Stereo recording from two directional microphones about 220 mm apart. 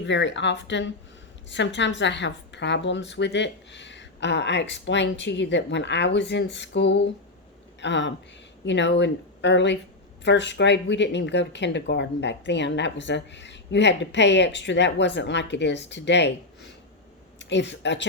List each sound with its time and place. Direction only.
0.0 s speech: 55° left (ahead or behind)